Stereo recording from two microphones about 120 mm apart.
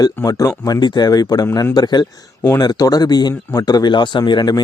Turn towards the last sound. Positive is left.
turn(degrees=35)  # may be behind; listen again after turning